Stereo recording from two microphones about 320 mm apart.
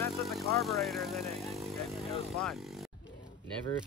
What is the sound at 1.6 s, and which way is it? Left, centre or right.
Vehicle, centre.